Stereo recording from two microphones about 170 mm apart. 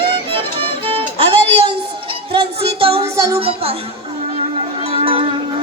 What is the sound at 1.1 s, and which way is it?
Music, 35° right (ahead or behind).